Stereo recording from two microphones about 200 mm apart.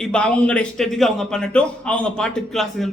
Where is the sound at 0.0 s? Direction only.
5° left (ahead or behind).